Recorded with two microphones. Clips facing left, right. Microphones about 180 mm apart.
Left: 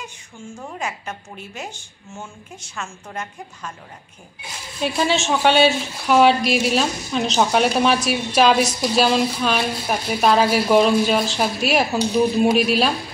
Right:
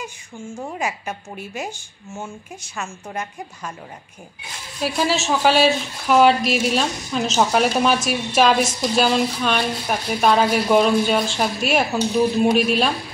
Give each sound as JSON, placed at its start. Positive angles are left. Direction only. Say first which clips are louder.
{"t": 0.7, "sound": "a woman's voice", "louder": "right 1 dB", "side_deg": -10}
{"t": 4.8, "sound": "speech", "louder": "left 1 dB", "side_deg": 0}